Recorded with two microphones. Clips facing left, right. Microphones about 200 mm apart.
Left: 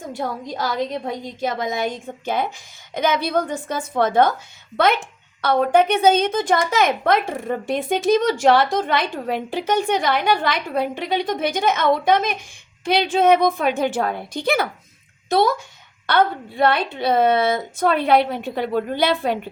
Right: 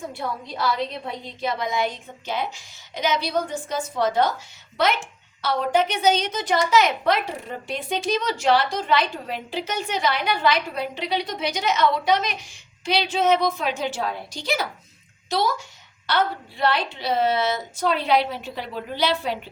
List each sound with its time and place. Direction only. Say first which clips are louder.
0.1 s a woman's voice: left 4 dB; 45° left (ahead or behind)